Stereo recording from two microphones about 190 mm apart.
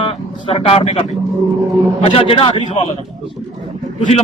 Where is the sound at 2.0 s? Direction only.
30° left (ahead or behind).